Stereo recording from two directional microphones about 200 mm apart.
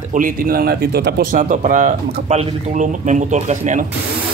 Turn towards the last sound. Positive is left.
turn(degrees=-35)  # may be behind; listen again after turning